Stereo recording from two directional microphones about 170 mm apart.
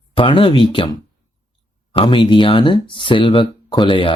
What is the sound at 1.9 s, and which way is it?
Speech, 30° left (ahead or behind).